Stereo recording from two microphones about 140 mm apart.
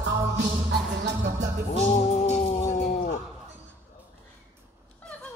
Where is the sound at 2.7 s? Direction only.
60° left (ahead or behind).